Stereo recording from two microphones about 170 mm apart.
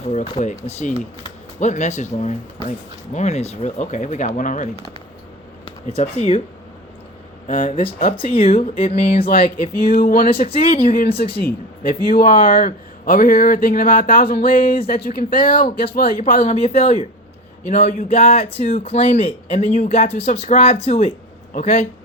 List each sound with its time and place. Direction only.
0.1 s speech: 40° left (ahead or behind)
5.6 s speech: 40° left (ahead or behind)
7.4 s speech: 50° left (ahead or behind)
8.1 s speech: 30° left (ahead or behind)
10.0 s speech: 60° left (ahead or behind)
10.4 s speech: 35° left (ahead or behind)
10.9 s speech: 65° left (ahead or behind)
16.4 s speech: 40° left (ahead or behind)